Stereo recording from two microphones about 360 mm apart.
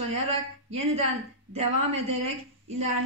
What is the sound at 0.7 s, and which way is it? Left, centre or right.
A woman's voice, centre.